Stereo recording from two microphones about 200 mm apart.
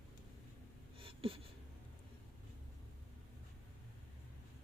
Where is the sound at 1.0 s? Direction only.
25° right (ahead or behind).